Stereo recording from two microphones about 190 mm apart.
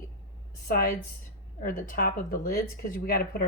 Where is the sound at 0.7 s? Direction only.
50° left (ahead or behind).